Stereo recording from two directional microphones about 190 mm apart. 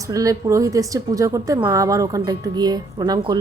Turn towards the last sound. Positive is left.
turn(degrees=-20)  # may be behind; listen again after turning